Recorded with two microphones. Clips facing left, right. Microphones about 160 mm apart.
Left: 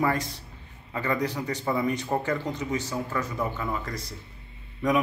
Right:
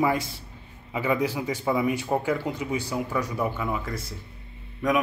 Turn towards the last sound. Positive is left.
turn(degrees=0)  # may be behind; listen again after turning